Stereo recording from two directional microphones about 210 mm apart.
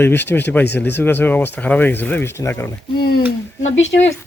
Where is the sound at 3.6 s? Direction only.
65° left (ahead or behind).